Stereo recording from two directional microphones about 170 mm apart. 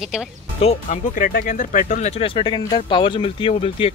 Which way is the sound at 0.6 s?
45° left (ahead or behind).